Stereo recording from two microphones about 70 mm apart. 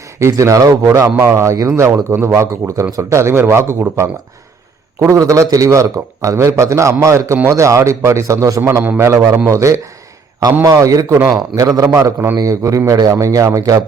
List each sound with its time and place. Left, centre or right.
0.2 s a man's voice: right
1.2 s a man's voice: right
5.2 s a man's voice: right
8.8 s a man's voice: right
9.0 s a man's voice: right